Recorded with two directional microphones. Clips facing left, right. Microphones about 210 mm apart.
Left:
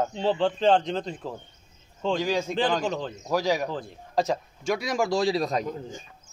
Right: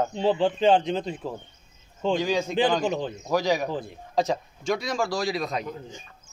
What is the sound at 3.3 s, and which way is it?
Speech, 5° left (ahead or behind).